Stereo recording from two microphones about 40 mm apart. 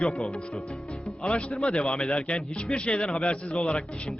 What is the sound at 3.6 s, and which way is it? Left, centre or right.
Speech, centre.